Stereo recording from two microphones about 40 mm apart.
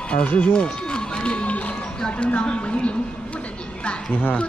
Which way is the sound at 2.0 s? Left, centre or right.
Left.